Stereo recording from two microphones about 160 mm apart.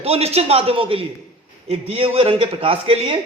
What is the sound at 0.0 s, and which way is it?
A man's voice, 40° right (ahead or behind).